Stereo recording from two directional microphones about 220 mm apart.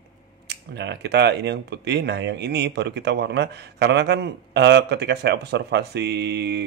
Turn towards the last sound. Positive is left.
turn(degrees=-50)  # may be behind; listen again after turning